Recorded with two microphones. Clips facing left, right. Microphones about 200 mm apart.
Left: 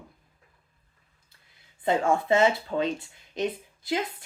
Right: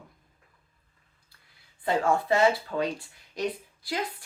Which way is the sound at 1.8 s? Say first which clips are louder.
Left 1 dB; 20° left (ahead or behind).